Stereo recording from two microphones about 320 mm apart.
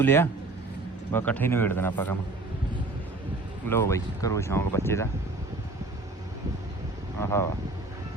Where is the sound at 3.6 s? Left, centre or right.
Centre.